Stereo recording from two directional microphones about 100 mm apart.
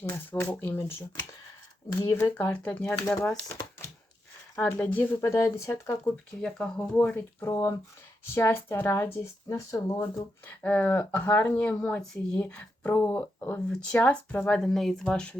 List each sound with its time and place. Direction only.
0.1 s speech: 25° left (ahead or behind)
2.5 s speech: 15° left (ahead or behind)
4.5 s speech: 15° left (ahead or behind)
6.4 s speech: 10° left (ahead or behind)
7.5 s speech: 30° left (ahead or behind)
10.0 s speech: 15° left (ahead or behind)
14.6 s speech: centre (ahead or behind)